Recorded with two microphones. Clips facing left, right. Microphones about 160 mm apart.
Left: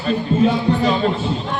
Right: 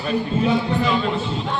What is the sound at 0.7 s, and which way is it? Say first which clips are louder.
Speech: left 4 dB; 40° left (ahead or behind).